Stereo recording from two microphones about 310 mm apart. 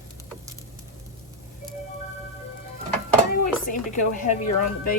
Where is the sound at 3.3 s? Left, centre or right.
Left.